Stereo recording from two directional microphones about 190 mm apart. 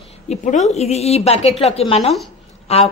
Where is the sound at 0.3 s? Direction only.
35° left (ahead or behind).